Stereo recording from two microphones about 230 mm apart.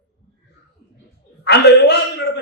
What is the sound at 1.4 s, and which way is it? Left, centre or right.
Speech, left.